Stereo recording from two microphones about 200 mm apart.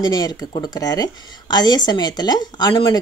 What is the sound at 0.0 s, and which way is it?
Speech, 20° left (ahead or behind).